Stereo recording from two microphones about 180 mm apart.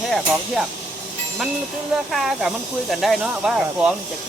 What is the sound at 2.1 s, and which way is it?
Speech, centre (ahead or behind).